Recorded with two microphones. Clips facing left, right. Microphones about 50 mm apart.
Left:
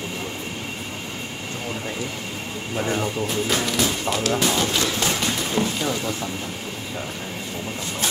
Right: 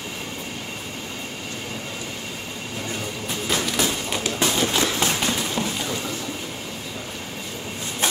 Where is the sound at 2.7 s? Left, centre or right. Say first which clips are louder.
Left 8 dB; left.